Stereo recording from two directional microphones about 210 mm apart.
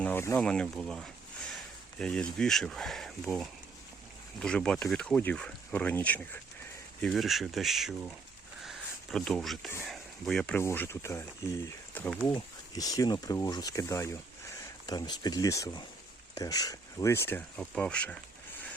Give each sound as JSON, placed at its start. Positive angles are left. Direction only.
{"t": 0.0, "sound": "speech", "side_deg": 10}
{"t": 8.6, "sound": "a sound", "side_deg": 0}
{"t": 9.8, "sound": "speech", "side_deg": 0}
{"t": 12.3, "sound": "speech", "side_deg": 15}